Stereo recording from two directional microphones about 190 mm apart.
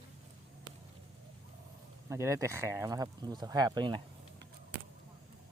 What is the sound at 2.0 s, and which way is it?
Speech, 15° right (ahead or behind).